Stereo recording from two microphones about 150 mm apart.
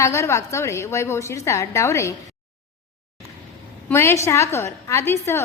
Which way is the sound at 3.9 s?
15° left (ahead or behind).